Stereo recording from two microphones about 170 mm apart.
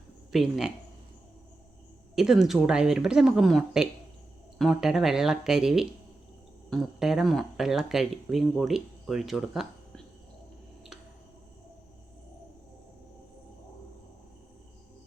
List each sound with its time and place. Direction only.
0.3 s speech: centre (ahead or behind)
2.1 s speech: centre (ahead or behind)